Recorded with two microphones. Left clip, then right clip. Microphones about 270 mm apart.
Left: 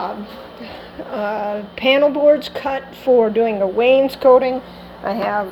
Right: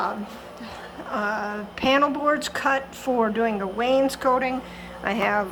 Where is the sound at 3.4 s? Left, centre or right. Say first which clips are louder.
Left 9 dB; right.